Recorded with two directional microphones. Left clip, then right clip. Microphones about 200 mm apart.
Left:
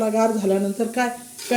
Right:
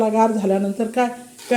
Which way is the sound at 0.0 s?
10° right (ahead or behind).